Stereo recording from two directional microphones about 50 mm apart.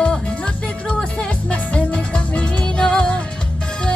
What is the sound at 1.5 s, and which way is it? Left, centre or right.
Music, left.